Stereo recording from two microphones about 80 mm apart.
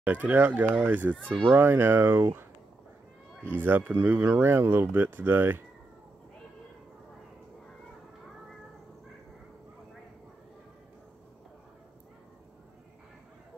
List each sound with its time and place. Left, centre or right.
0.0 s speech: right
1.1 s a child's voice: centre
1.5 s speech: right
3.4 s speech: right